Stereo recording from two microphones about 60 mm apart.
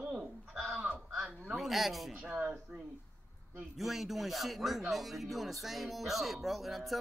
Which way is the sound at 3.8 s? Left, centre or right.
Centre.